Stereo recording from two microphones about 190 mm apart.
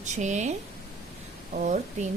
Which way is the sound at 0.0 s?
40° right (ahead or behind).